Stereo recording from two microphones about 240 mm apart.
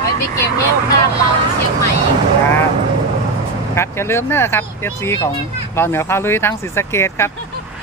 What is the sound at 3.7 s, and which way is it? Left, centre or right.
Speech, centre.